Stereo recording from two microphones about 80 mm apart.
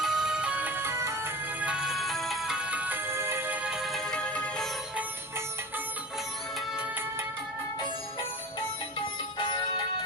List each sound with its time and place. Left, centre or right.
0.0 s music: centre; by 1.3 s right
1.6 s music: centre
3.1 s music: right
3.8 s music: centre
9.4 s music: left